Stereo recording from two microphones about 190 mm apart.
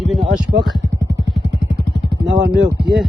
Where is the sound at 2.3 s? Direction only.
70° right (ahead or behind).